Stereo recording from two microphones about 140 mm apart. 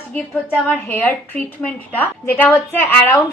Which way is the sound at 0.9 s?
15° left (ahead or behind).